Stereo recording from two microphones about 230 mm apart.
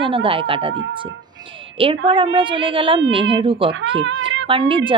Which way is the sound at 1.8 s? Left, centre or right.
Right.